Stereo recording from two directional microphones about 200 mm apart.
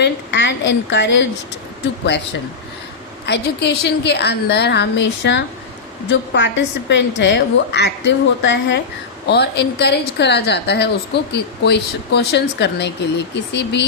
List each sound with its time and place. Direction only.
0.0 s a woman's voice: 60° left (ahead or behind)
3.2 s a woman's voice: 55° left (ahead or behind)